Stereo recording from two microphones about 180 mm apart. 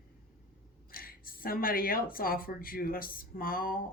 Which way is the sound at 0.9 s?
55° left (ahead or behind).